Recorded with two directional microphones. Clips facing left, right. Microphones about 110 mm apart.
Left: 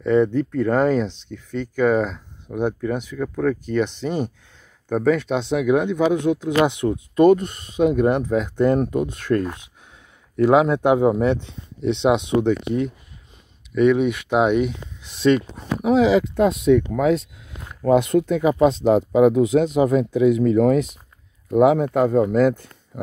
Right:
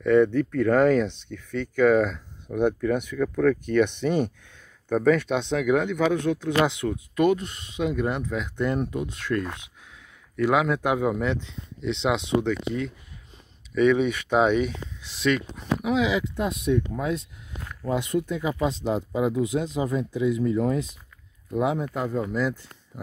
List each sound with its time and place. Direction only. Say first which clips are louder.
0.0 s speech: left 1 dB; 15° left (ahead or behind)
4.0 s speech: even; 5° left (ahead or behind); by 7.2 s 25° left (ahead or behind)
7.2 s speech: left 8 dB; 50° left (ahead or behind)
10.3 s speech: left 6 dB; 30° left (ahead or behind)
13.7 s speech: left 3 dB; 10° left (ahead or behind)
15.2 s speech: left 6 dB; 35° left (ahead or behind)
16.3 s speech: left 8 dB; 90° left
17.8 s speech: left 9 dB; 65° left (ahead or behind)